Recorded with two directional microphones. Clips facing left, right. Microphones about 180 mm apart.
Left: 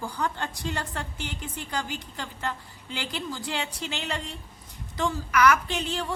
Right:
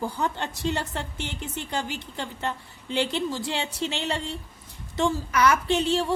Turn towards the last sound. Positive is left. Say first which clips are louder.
# right 7 dB
turn(degrees=-25)  # may be behind; listen again after turning